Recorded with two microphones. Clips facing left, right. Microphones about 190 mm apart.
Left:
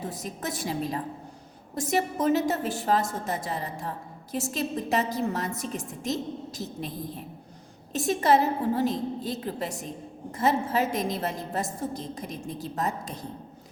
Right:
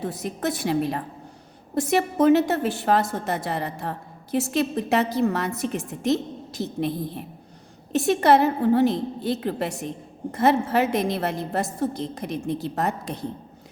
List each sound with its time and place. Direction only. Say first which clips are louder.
0.0 s a woman's voice: right 7 dB; 65° right (ahead or behind)